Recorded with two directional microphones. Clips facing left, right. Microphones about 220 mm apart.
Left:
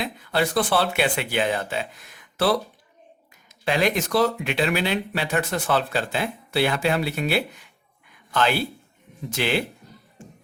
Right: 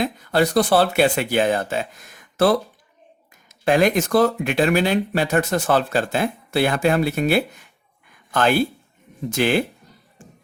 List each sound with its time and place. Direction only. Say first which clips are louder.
0.0 s speech: right 5 dB; 45° right (ahead or behind)